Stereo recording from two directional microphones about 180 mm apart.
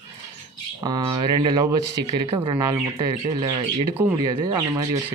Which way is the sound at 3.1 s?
30° right (ahead or behind).